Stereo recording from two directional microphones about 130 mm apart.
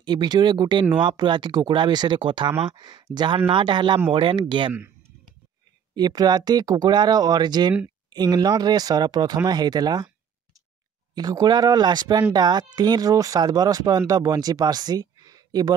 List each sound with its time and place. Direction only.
0.0 s speech: 35° right (ahead or behind)
5.9 s speech: 30° right (ahead or behind)
11.1 s speech: 30° right (ahead or behind)